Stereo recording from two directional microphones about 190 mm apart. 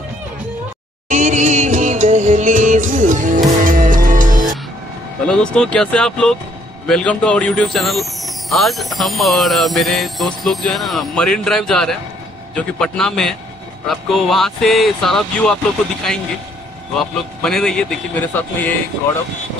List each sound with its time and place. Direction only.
1.0 s music: 45° right (ahead or behind)
5.2 s speech: 5° left (ahead or behind)
16.9 s speech: centre (ahead or behind)